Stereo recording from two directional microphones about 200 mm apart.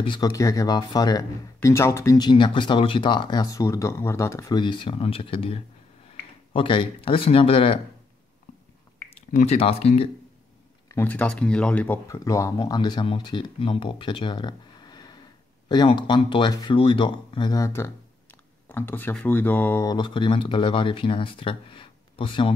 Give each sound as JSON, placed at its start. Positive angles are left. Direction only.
{"t": 0.0, "sound": "speech", "side_deg": 20}
{"t": 8.5, "sound": "squish", "side_deg": 40}
{"t": 9.3, "sound": "speech", "side_deg": 35}
{"t": 10.9, "sound": "speech", "side_deg": 10}